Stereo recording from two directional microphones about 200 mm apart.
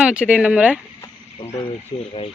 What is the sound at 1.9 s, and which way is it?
Speech, 20° left (ahead or behind).